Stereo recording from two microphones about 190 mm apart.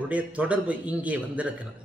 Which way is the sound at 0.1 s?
5° right (ahead or behind).